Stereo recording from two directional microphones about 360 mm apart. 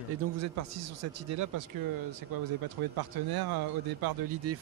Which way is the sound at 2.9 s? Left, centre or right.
Right.